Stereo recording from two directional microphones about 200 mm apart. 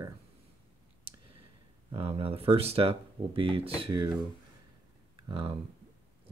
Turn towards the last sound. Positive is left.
turn(degrees=-25)  # may be behind; listen again after turning